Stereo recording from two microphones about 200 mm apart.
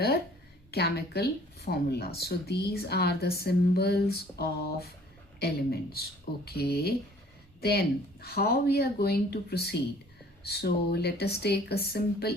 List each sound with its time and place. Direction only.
0.7 s speech: 55° left (ahead or behind)